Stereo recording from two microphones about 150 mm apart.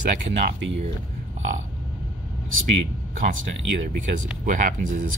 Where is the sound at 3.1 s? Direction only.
60° right (ahead or behind).